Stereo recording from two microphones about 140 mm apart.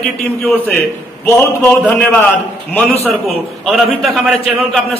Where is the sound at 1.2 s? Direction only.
15° left (ahead or behind).